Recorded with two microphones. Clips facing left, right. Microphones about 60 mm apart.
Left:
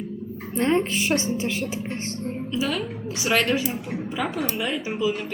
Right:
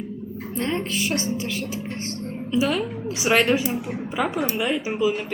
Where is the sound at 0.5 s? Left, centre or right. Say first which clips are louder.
Left 4 dB; left.